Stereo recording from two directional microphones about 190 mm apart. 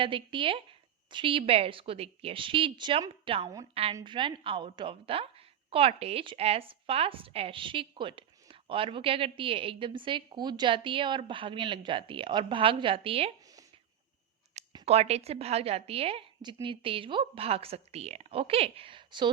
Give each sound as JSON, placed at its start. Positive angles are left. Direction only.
{"t": 0.0, "sound": "a woman's voice", "side_deg": -25}
{"t": 14.7, "sound": "a woman's voice", "side_deg": -30}